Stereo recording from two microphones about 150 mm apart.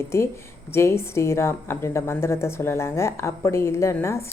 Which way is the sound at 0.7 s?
15° left (ahead or behind).